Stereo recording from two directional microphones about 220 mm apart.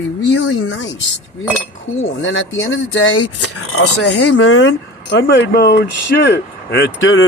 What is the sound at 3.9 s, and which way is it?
Speech, 90° left.